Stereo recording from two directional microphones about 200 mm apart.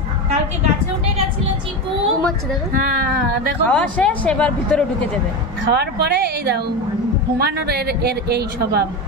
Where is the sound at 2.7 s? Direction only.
45° right (ahead or behind).